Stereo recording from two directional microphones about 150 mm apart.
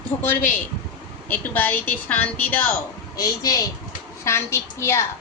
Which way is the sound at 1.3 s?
10° left (ahead or behind).